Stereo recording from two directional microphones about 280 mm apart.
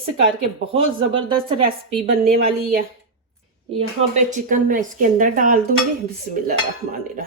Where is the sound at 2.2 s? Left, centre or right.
Right.